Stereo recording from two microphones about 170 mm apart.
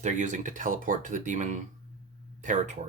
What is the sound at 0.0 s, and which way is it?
Speech, 45° right (ahead or behind).